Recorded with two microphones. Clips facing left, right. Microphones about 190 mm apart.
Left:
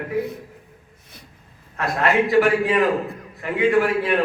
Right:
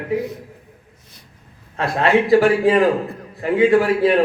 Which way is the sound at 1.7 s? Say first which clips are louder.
Right 3 dB; 25° right (ahead or behind).